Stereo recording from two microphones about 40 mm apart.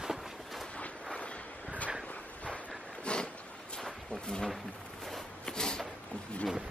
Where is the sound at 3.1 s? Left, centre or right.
Left.